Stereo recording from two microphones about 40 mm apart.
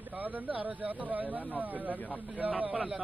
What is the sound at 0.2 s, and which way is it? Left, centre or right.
A man's voice, right.